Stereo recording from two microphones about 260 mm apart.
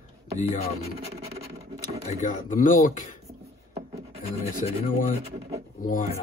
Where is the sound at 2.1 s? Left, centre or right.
Left.